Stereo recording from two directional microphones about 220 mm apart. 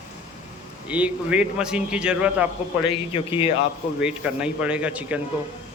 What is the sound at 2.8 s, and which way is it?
Speech, 25° left (ahead or behind).